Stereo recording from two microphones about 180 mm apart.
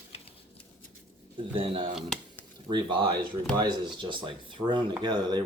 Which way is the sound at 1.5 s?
30° right (ahead or behind).